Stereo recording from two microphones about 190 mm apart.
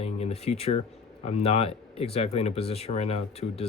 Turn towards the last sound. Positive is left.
turn(degrees=30)  # may be behind; listen again after turning